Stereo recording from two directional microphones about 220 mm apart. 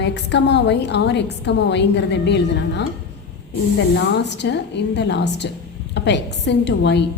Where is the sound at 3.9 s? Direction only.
50° left (ahead or behind).